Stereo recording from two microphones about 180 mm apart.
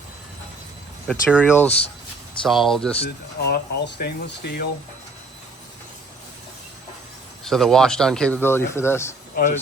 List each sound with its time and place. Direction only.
1.0 s speech: 5° left (ahead or behind)
3.0 s speech: 65° left (ahead or behind)
7.4 s speech: centre (ahead or behind)
9.3 s speech: 45° left (ahead or behind)